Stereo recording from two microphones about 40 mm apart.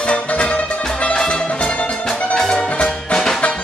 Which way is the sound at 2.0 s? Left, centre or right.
Centre.